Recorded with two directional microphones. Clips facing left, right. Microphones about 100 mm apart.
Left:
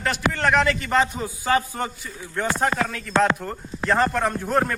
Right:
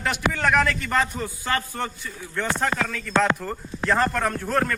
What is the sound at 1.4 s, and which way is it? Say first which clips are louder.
A man's voice: left 5 dB; 15° left (ahead or behind).